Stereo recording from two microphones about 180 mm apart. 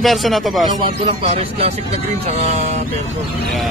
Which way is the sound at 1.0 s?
30° right (ahead or behind).